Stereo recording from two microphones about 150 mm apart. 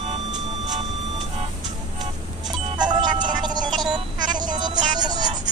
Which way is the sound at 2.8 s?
30° right (ahead or behind).